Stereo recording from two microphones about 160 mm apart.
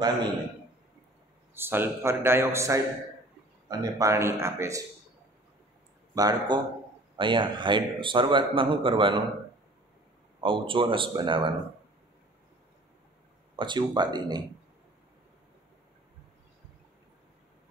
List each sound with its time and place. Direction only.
1.5 s a man's voice: 15° right (ahead or behind)
6.1 s a man's voice: 25° right (ahead or behind)
10.4 s a man's voice: 30° right (ahead or behind)
13.6 s speech: 30° right (ahead or behind)